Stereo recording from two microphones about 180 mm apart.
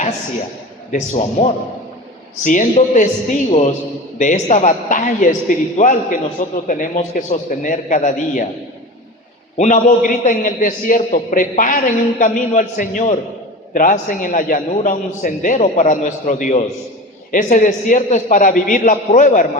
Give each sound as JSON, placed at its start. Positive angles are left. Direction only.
{"t": 0.9, "sound": "a man's voice", "side_deg": 40}
{"t": 9.6, "sound": "a man's voice", "side_deg": 45}